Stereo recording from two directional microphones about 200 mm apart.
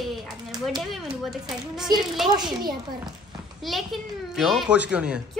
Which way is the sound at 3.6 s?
Centre (ahead or behind).